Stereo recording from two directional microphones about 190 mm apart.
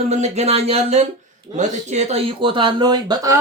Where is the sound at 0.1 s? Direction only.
35° right (ahead or behind).